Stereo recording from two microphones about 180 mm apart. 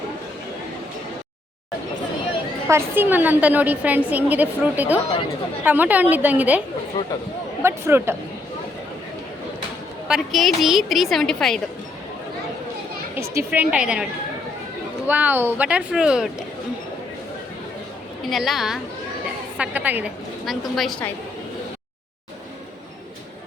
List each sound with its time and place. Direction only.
2.6 s a woman's voice: 15° right (ahead or behind)
7.0 s speech: 25° left (ahead or behind)
7.6 s a woman's voice: 15° right (ahead or behind)
10.1 s a woman's voice: centre (ahead or behind)
13.1 s a woman's voice: 15° right (ahead or behind)
18.3 s a woman's voice: centre (ahead or behind)